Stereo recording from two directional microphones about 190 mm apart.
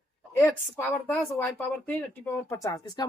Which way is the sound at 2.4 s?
15° left (ahead or behind).